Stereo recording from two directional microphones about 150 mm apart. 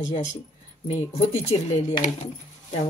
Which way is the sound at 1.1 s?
45° left (ahead or behind).